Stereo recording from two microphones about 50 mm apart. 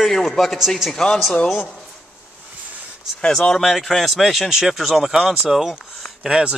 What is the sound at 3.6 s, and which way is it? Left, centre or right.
Speech, centre.